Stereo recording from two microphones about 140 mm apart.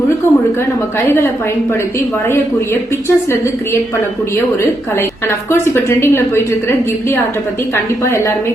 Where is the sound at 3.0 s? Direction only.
20° left (ahead or behind).